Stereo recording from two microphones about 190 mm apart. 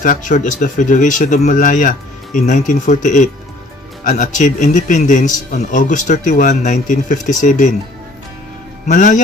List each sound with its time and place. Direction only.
0.0 s a man's voice: 45° left (ahead or behind)
8.9 s a man's voice: 40° left (ahead or behind)